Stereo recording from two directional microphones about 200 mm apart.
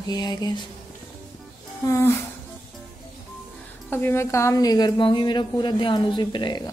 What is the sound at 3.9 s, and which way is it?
A woman's voice, 10° left (ahead or behind).